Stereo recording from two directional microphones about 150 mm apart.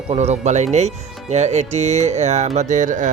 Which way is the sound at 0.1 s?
45° right (ahead or behind).